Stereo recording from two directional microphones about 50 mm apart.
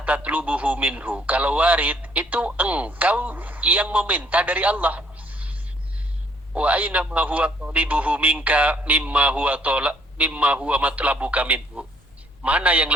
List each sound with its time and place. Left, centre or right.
0.0 s a man's voice: right